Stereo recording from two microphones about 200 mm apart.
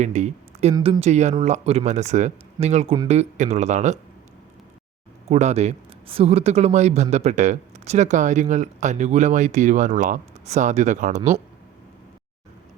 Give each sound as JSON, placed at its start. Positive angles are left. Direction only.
{"t": 0.0, "sound": "speech", "side_deg": -35}
{"t": 5.3, "sound": "speech", "side_deg": -35}